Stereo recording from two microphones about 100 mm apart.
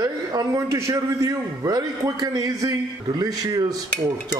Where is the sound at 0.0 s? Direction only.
40° right (ahead or behind).